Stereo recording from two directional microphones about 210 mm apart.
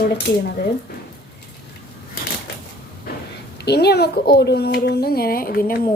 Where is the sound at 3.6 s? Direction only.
50° left (ahead or behind).